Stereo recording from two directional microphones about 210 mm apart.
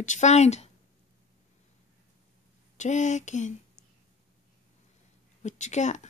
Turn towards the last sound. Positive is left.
turn(degrees=35)  # may be behind; listen again after turning